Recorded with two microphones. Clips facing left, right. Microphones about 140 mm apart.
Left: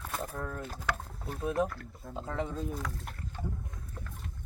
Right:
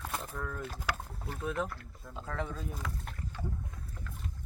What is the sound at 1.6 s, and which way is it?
Speech, 45° left (ahead or behind).